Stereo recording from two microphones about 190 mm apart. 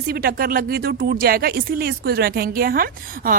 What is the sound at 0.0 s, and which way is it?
A woman's voice, 50° right (ahead or behind).